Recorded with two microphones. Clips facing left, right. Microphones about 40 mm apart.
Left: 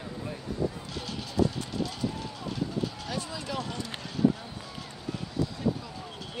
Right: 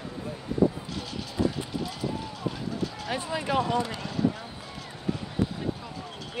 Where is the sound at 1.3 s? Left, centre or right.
Centre.